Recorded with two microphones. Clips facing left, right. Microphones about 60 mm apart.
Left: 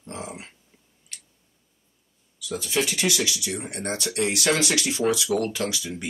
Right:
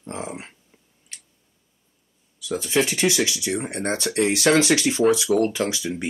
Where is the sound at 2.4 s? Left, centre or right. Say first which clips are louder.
Right 4 dB; right.